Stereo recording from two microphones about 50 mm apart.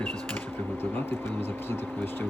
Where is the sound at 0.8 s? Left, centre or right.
Left.